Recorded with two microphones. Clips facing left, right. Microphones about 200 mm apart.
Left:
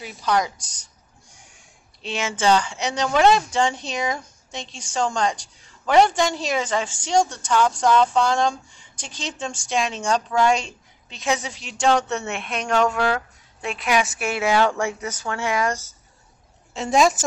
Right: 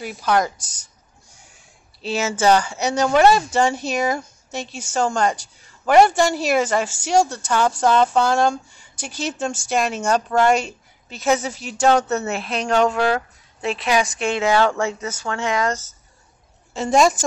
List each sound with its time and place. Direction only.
0.0 s speech: 5° right (ahead or behind)
2.0 s speech: 5° right (ahead or behind)
12.3 s a woman's voice: 35° right (ahead or behind)
12.9 s a sound: 30° right (ahead or behind)
13.7 s a woman's voice: centre (ahead or behind)
16.7 s speech: centre (ahead or behind)